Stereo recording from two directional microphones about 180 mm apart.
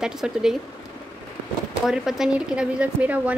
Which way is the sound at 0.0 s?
5° right (ahead or behind).